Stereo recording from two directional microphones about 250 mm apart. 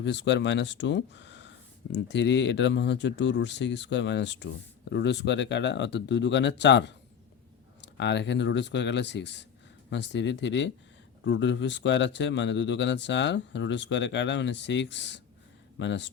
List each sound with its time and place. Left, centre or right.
0.0 s speech: left